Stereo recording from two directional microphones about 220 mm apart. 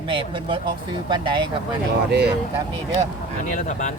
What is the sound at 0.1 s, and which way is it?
Speech, 25° right (ahead or behind).